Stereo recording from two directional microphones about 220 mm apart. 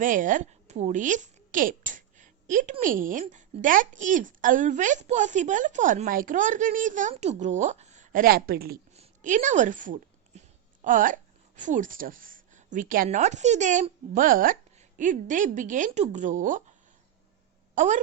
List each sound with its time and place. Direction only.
0.0 s a woman's voice: 35° right (ahead or behind)
9.0 s a sound: 35° right (ahead or behind)
10.8 s speech: 35° right (ahead or behind)
17.7 s a woman's voice: 35° right (ahead or behind)